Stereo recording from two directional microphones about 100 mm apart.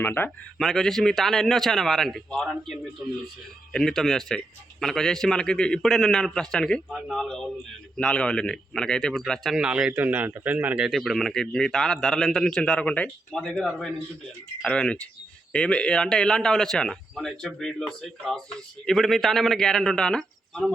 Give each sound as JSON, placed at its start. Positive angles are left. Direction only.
{"t": 0.0, "sound": "speech", "side_deg": 20}
{"t": 0.6, "sound": "a man's voice", "side_deg": 5}
{"t": 9.6, "sound": "speech", "side_deg": -10}
{"t": 10.9, "sound": "a man's voice", "side_deg": 0}